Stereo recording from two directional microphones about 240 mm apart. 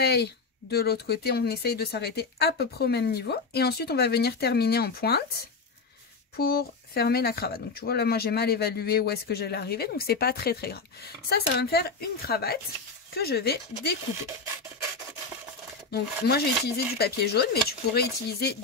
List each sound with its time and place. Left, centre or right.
0.0 s speech: left
6.3 s speech: left
15.9 s speech: left